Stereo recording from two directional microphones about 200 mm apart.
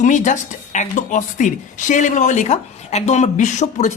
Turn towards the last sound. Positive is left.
turn(degrees=35)  # may be behind; listen again after turning